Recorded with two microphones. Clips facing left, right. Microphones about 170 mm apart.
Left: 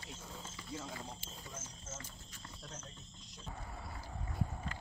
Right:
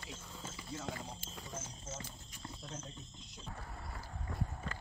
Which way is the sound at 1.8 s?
15° right (ahead or behind).